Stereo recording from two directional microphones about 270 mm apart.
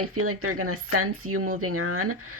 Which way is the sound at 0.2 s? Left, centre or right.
Right.